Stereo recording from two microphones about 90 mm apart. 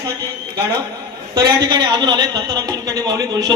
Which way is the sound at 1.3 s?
50° right (ahead or behind).